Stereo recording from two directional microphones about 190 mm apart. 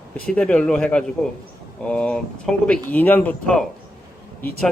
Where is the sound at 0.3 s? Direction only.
5° left (ahead or behind).